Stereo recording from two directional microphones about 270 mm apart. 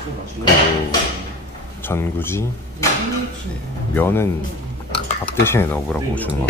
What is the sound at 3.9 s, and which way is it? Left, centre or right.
Speech, centre.